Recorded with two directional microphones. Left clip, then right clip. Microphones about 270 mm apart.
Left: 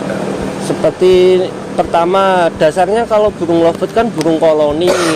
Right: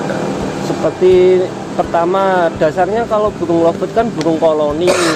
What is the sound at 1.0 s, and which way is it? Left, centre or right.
Speech, left.